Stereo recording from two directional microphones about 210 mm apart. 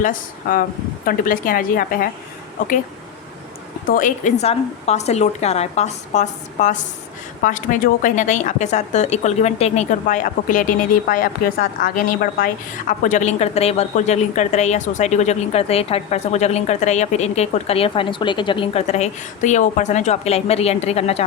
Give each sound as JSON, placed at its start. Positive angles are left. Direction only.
{"t": 0.0, "sound": "a woman's voice", "side_deg": 40}
{"t": 3.8, "sound": "a woman's voice", "side_deg": 40}